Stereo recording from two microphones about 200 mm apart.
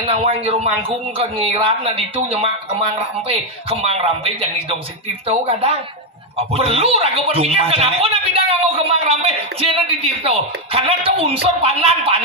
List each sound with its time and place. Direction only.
0.0 s speech: 30° right (ahead or behind)